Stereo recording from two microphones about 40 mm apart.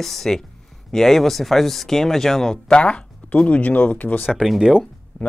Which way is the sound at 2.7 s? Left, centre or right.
Left.